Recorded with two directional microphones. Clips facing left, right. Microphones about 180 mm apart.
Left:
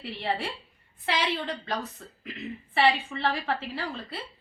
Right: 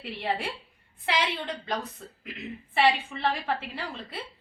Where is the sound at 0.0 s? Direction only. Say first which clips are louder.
Even; 15° right (ahead or behind).